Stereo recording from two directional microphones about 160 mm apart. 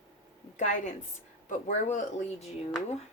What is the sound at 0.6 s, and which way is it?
Speech, 50° left (ahead or behind).